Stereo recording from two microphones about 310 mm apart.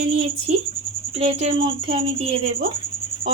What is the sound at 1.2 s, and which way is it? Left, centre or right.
Speech, right.